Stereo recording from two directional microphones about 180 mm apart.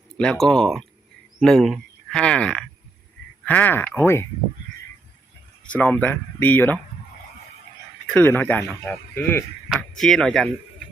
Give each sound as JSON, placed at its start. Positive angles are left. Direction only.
{"t": 0.2, "sound": "speech", "side_deg": 5}
{"t": 5.7, "sound": "speech", "side_deg": 10}
{"t": 8.0, "sound": "speech", "side_deg": 10}
{"t": 9.6, "sound": "speech", "side_deg": 0}